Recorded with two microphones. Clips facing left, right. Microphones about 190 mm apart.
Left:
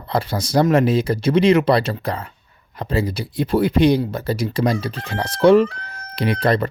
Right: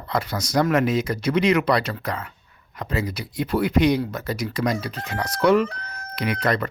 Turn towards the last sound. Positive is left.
turn(degrees=30)  # may be behind; listen again after turning